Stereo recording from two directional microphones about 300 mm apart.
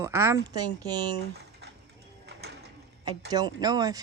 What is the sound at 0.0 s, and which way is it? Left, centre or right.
Speech, centre.